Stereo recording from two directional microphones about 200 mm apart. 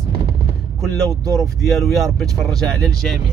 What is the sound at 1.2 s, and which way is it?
Speech, 15° right (ahead or behind).